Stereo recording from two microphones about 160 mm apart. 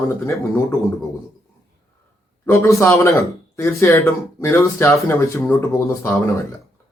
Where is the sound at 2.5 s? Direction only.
20° left (ahead or behind).